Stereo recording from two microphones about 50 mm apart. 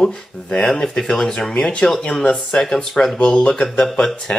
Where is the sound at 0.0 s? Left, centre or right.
Centre.